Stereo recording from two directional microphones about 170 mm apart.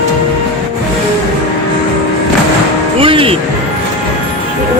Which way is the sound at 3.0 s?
30° right (ahead or behind).